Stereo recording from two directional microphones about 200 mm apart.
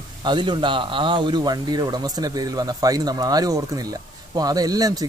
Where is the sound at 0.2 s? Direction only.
20° right (ahead or behind).